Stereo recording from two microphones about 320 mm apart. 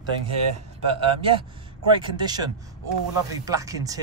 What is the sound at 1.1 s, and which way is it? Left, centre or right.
Speech, centre.